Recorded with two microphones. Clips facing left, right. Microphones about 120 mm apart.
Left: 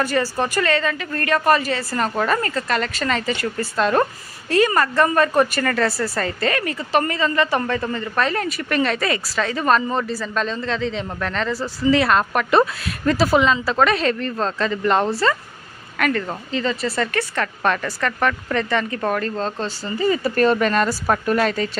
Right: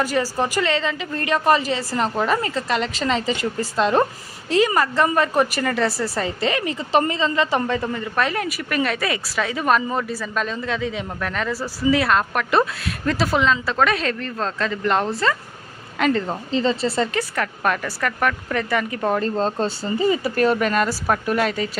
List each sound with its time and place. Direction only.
0.0 s a woman's voice: 15° right (ahead or behind)
16.0 s speech: 20° right (ahead or behind)
17.2 s speech: 10° right (ahead or behind)
19.1 s speech: 35° right (ahead or behind)
20.1 s speech: 10° right (ahead or behind)